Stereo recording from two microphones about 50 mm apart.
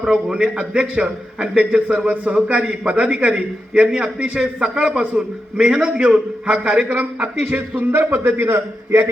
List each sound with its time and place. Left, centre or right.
0.1 s a man's voice: centre
6.8 s a man's voice: right
7.8 s a man's voice: right